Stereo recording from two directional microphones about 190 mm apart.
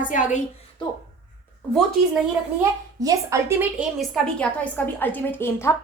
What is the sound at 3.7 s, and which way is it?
A woman's voice, centre (ahead or behind).